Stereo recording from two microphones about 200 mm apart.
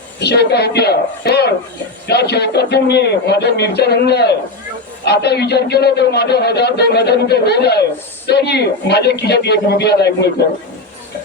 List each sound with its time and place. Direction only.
0.2 s a man's voice: 55° left (ahead or behind)